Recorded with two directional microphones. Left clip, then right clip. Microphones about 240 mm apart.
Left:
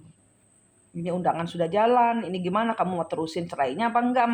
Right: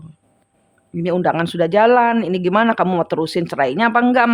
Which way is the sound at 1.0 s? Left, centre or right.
Right.